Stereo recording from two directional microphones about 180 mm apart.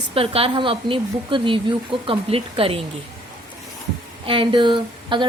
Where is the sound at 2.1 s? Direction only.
30° right (ahead or behind).